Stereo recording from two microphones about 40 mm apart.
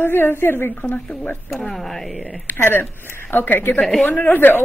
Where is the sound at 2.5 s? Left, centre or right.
Left.